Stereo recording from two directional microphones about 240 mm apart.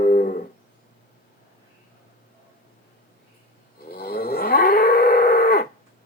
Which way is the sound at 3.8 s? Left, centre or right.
Left.